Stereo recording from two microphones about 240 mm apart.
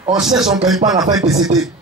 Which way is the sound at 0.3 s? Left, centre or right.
Centre.